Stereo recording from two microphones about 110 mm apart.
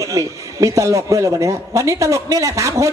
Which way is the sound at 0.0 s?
30° right (ahead or behind).